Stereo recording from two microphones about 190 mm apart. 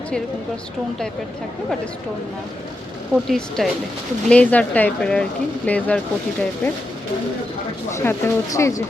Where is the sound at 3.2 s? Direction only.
Centre (ahead or behind).